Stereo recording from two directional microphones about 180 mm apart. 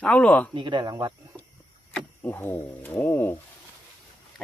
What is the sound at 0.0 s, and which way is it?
Speech, 5° left (ahead or behind).